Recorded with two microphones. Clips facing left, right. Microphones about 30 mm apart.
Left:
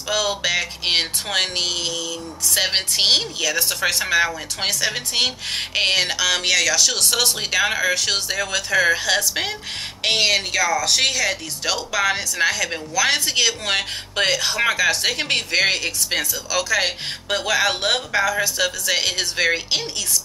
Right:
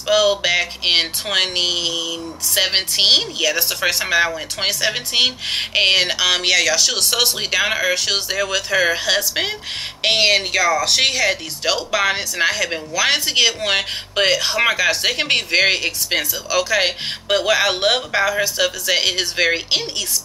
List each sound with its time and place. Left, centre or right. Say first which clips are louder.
0.1 s speech: right 5 dB; centre